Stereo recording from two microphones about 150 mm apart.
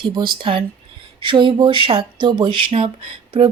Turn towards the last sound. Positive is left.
turn(degrees=-40)  # may be behind; listen again after turning